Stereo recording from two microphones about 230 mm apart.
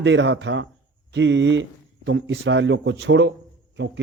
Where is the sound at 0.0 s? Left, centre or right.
Right.